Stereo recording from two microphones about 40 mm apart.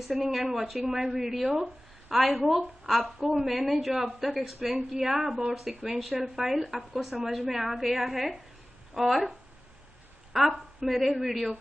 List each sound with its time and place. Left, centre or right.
0.1 s a woman's voice: centre
0.7 s a woman's voice: centre
10.3 s a woman's voice: centre